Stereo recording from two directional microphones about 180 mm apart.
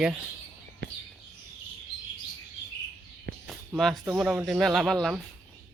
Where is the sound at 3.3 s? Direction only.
80° right.